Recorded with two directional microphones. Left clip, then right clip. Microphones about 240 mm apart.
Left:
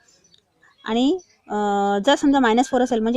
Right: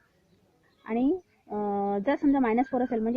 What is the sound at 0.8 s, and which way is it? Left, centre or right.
A woman's voice, left.